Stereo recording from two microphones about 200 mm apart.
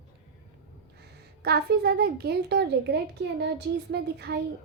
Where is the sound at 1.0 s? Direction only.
55° right (ahead or behind).